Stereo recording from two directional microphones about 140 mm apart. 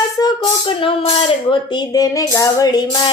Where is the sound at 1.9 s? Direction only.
25° left (ahead or behind).